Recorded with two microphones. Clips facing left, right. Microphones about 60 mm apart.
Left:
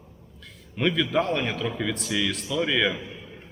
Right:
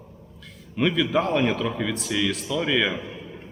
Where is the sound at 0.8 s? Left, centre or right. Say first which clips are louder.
Right 2 dB; centre.